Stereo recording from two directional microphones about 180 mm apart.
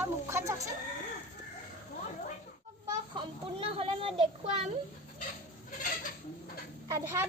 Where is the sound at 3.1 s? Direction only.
30° right (ahead or behind).